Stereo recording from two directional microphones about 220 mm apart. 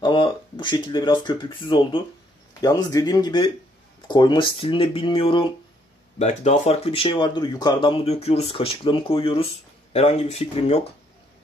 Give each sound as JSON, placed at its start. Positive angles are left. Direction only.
{"t": 0.0, "sound": "speech", "side_deg": 20}